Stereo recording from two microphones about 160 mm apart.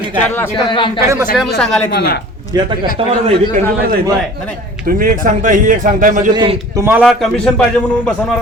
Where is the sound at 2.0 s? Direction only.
85° left.